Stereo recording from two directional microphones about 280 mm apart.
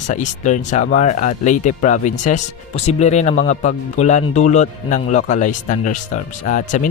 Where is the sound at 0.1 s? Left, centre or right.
Left.